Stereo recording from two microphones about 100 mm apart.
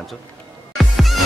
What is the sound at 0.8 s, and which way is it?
Music, centre (ahead or behind).